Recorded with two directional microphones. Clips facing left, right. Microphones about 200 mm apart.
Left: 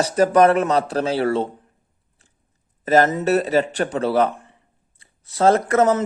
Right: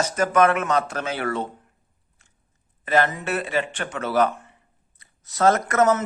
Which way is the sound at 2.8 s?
40° left (ahead or behind).